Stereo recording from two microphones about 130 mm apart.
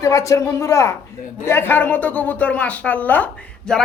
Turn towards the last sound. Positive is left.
turn(degrees=5)  # may be behind; listen again after turning